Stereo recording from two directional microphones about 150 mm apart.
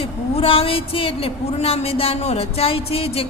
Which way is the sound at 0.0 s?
40° left (ahead or behind).